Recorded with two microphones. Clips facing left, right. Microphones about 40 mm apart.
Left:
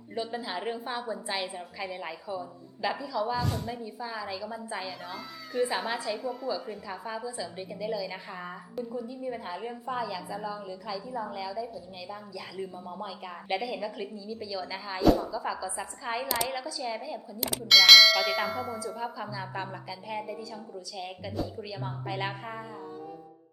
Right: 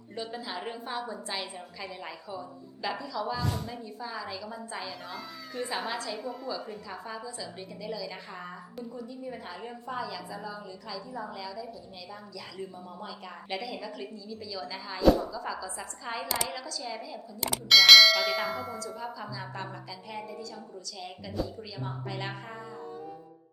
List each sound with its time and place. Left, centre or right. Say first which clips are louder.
0.2 s a woman's voice: left 3 dB; centre
6.1 s bell: left 3 dB; centre
7.3 s a woman's voice: left 4 dB; centre
17.4 s bell: even; centre
18.8 s a woman's voice: left 3 dB; centre
21.6 s a woman's voice: left 2 dB; centre